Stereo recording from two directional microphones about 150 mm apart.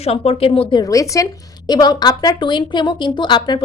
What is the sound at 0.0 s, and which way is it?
A woman's voice, 40° left (ahead or behind).